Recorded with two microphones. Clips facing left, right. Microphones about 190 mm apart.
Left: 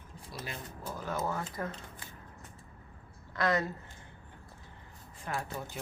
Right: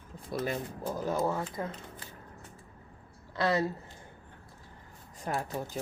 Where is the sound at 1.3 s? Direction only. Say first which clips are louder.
Right 3 dB; 20° right (ahead or behind).